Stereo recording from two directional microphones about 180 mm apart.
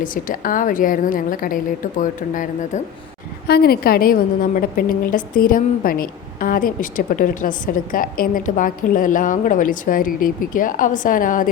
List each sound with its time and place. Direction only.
0.0 s a woman's voice: 50° left (ahead or behind)
3.4 s a woman's voice: 60° left (ahead or behind)